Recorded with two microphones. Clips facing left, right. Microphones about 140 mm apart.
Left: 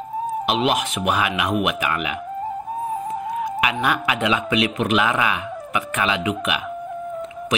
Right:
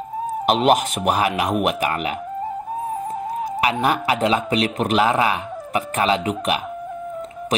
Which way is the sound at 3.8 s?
35° right (ahead or behind).